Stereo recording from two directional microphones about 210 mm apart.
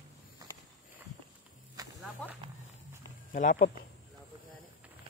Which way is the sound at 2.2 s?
5° left (ahead or behind).